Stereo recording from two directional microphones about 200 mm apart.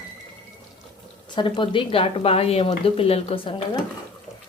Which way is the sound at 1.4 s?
25° left (ahead or behind).